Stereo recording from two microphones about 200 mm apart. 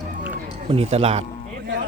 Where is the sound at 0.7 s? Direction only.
30° right (ahead or behind).